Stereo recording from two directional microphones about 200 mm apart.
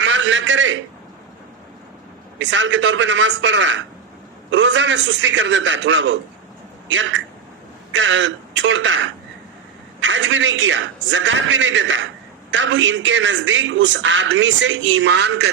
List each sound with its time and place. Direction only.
0.0 s a man's voice: 65° right (ahead or behind)
2.4 s a man's voice: 65° right (ahead or behind)